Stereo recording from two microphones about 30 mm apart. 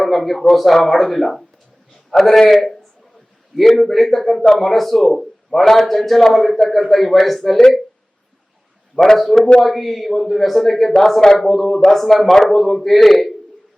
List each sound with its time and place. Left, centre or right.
0.0 s a man's voice: centre
9.1 s a man's voice: centre
11.7 s a man's voice: centre
11.9 s speech: centre